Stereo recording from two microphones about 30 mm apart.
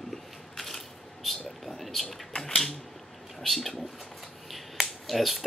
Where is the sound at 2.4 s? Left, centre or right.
Centre.